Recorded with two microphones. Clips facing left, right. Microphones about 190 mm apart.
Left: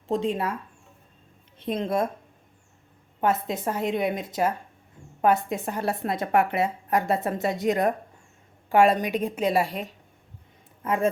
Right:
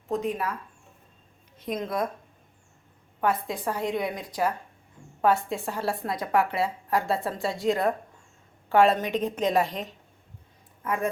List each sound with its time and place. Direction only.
0.1 s a woman's voice: 25° left (ahead or behind)
1.5 s a woman's voice: 30° left (ahead or behind)
3.2 s a woman's voice: 25° left (ahead or behind)
10.8 s a woman's voice: 25° left (ahead or behind)